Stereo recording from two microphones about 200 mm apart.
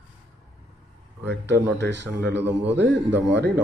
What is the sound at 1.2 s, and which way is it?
Speech, 60° right (ahead or behind).